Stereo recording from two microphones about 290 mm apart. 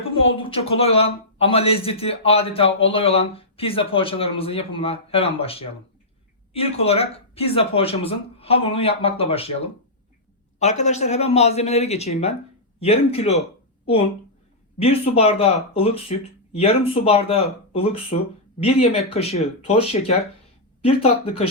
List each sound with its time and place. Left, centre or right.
0.2 s speech: centre
14.8 s speech: centre
20.8 s speech: left